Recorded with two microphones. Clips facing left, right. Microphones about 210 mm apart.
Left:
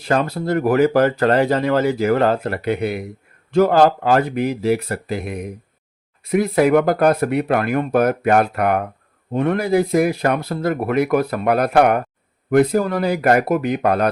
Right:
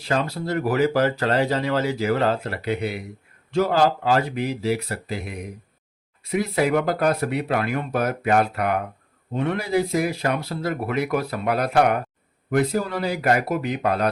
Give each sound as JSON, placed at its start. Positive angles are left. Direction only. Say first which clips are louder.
{"t": 0.0, "sound": "speech", "louder": "left 5 dB", "side_deg": 55}